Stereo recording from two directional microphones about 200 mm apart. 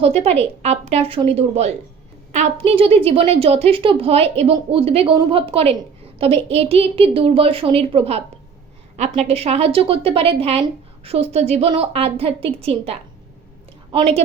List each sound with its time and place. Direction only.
0.0 s a woman's voice: 30° right (ahead or behind)